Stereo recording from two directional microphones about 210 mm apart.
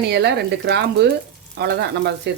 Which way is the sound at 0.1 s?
55° right (ahead or behind).